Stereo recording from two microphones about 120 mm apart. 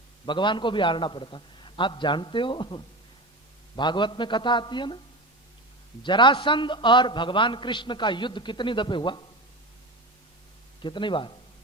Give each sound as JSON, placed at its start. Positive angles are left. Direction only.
{"t": 0.3, "sound": "a man's voice", "side_deg": 40}
{"t": 6.0, "sound": "a man's voice", "side_deg": 40}
{"t": 10.8, "sound": "a man's voice", "side_deg": 40}